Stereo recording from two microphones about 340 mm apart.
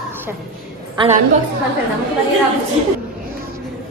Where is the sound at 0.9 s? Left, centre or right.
Centre.